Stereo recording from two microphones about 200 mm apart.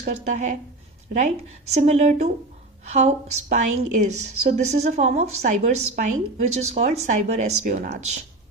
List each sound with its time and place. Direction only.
0.0 s a woman's voice: 40° right (ahead or behind)